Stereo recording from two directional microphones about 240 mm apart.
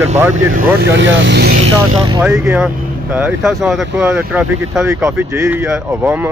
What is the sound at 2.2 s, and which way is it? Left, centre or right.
Speech, centre.